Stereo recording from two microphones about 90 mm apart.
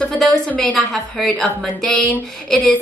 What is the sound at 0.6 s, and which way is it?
A woman's voice, centre (ahead or behind).